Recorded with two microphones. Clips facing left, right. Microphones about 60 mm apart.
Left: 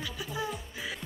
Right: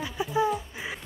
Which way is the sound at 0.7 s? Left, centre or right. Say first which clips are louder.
Right 2 dB; right.